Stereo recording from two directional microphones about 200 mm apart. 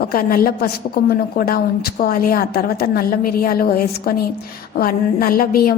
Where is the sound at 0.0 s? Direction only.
45° left (ahead or behind).